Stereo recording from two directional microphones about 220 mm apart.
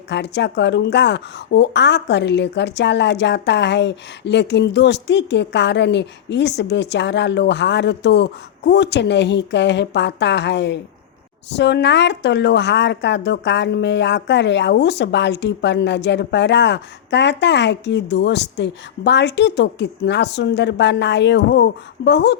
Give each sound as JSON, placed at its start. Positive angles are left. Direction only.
{"t": 0.1, "sound": "a woman's voice", "side_deg": 50}